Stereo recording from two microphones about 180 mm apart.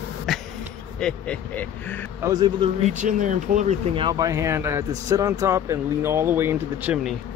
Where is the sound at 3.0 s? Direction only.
45° right (ahead or behind).